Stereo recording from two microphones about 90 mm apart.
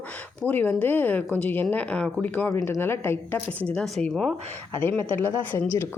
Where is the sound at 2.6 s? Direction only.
25° left (ahead or behind).